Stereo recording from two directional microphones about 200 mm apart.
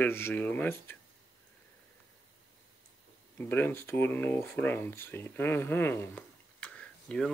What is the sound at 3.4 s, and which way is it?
Speech, 10° left (ahead or behind).